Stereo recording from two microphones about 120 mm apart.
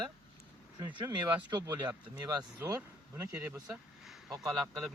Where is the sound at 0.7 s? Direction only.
40° right (ahead or behind).